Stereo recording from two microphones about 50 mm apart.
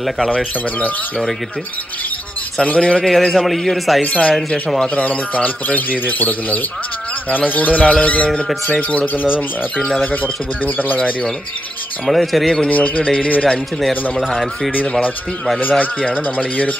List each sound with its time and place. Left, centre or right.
0.7 s speech: left
2.6 s speech: left
3.0 s a man's voice: centre
4.0 s speech: left
12.1 s a man's voice: centre
12.6 s speech: left
14.1 s speech: centre
16.1 s speech: left